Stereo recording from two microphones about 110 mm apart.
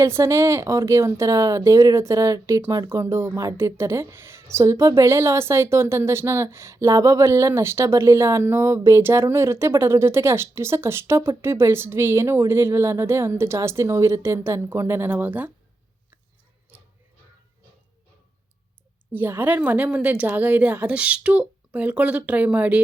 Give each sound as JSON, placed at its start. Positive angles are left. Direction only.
{"t": 0.0, "sound": "speech", "side_deg": -25}
{"t": 19.1, "sound": "a woman's voice", "side_deg": -20}